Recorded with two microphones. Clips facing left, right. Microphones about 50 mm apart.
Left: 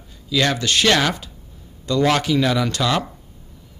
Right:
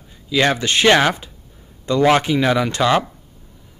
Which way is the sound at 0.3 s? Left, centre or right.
Right.